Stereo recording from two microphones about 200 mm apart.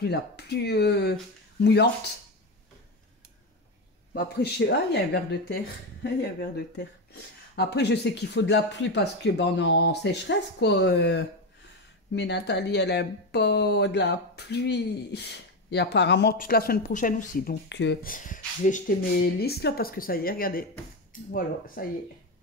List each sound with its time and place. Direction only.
0.0 s speech: 55° left (ahead or behind)
4.1 s speech: 55° left (ahead or behind)
16.3 s speech: 45° left (ahead or behind)
17.6 s speech: 65° left (ahead or behind)
18.0 s speech: 40° left (ahead or behind)
19.4 s speech: 50° left (ahead or behind)